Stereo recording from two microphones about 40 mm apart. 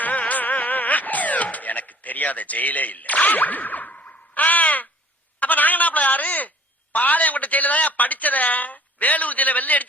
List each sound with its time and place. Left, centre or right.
0.0 s music: left
3.9 s a sound: left
6.9 s a woman's voice: left